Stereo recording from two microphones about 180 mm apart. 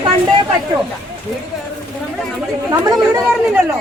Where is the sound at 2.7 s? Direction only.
15° right (ahead or behind).